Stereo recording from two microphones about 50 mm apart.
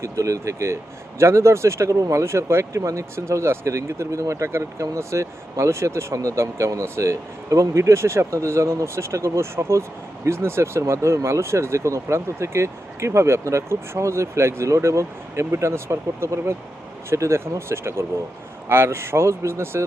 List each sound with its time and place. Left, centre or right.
0.0 s speech: right
1.2 s speech: right